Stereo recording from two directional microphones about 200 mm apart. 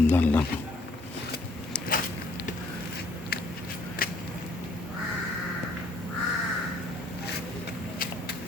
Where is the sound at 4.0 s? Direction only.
45° left (ahead or behind).